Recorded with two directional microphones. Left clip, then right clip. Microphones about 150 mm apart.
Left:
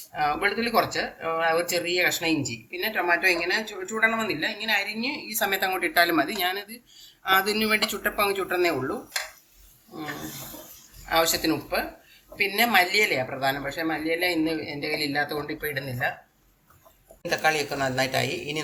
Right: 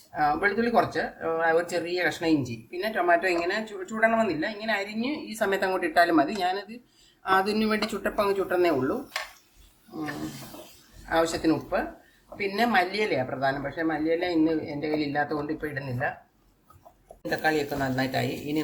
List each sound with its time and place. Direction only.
0.1 s speech: 30° right (ahead or behind)
11.1 s speech: 35° right (ahead or behind)
17.2 s speech: 15° right (ahead or behind)